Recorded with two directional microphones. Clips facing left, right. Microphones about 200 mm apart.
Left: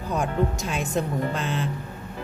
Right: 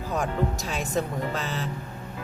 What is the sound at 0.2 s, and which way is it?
Speech, centre (ahead or behind).